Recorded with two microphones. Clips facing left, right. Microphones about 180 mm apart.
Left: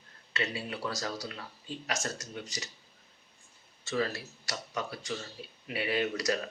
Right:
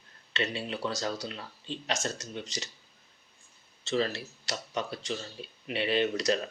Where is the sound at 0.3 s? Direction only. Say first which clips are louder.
Right 2 dB; 25° right (ahead or behind).